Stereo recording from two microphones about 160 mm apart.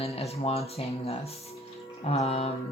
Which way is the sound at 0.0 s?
40° left (ahead or behind).